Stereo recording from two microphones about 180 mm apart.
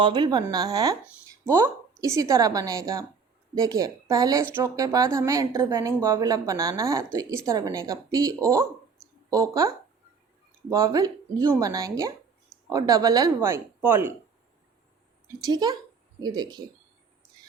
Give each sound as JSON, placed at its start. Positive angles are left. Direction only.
{"t": 0.0, "sound": "a woman's voice", "side_deg": -25}
{"t": 15.4, "sound": "a woman's voice", "side_deg": -20}